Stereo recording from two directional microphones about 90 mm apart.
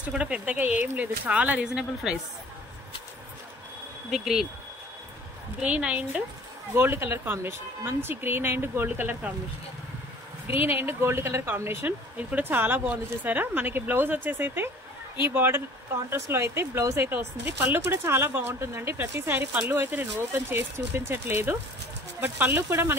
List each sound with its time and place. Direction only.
0.0 s speech: 15° right (ahead or behind)
4.1 s speech: 5° right (ahead or behind)
5.6 s speech: 15° right (ahead or behind)
6.7 s speech: 25° right (ahead or behind)
10.4 s speech: 20° right (ahead or behind)